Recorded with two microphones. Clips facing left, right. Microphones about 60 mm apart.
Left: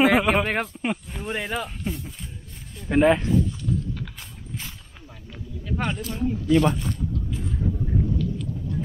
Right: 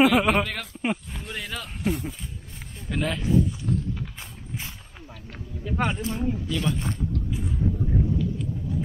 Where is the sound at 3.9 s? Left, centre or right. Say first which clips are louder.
Even; centre.